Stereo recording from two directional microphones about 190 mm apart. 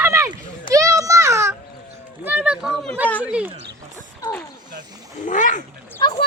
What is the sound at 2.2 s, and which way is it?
Speech, 10° right (ahead or behind).